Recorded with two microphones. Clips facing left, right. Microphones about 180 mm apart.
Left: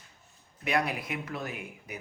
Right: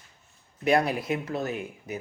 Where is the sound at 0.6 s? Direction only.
35° right (ahead or behind).